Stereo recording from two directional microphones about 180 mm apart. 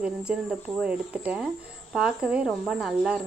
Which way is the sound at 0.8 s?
5° right (ahead or behind).